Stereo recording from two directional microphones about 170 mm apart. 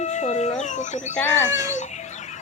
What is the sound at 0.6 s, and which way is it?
Speech, 45° left (ahead or behind).